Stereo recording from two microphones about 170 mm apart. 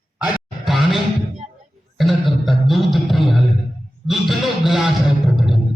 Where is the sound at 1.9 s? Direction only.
Centre (ahead or behind).